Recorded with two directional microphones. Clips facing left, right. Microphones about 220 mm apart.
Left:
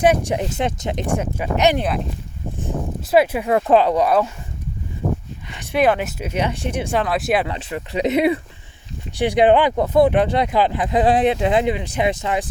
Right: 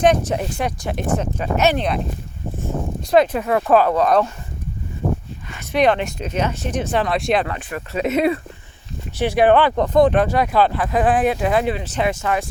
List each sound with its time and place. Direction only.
0.0 s speech: 10° left (ahead or behind)
3.1 s speech: 10° left (ahead or behind)
3.5 s speech: 20° left (ahead or behind)
5.5 s speech: 5° left (ahead or behind)
7.4 s speech: 20° left (ahead or behind)